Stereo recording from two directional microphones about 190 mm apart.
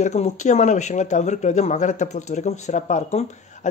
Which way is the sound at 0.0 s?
40° left (ahead or behind).